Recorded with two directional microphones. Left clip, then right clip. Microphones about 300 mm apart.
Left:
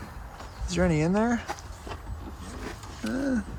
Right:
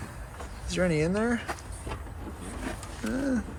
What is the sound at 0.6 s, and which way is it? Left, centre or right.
Speech, left.